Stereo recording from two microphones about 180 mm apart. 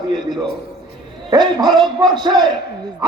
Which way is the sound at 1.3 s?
20° right (ahead or behind).